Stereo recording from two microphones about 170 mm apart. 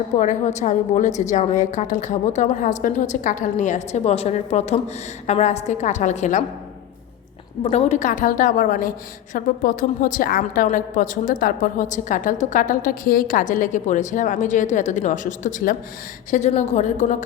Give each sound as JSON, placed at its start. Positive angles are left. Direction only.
{"t": 0.2, "sound": "a woman's voice", "side_deg": 45}
{"t": 7.6, "sound": "a woman's voice", "side_deg": 40}